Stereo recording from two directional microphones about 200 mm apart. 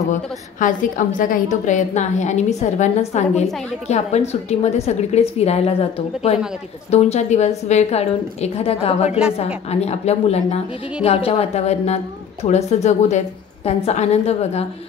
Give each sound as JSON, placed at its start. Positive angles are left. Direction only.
{"t": 0.1, "sound": "a woman's voice", "side_deg": 40}